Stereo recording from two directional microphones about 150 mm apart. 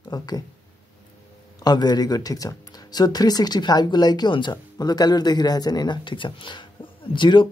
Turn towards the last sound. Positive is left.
turn(degrees=30)  # may be behind; listen again after turning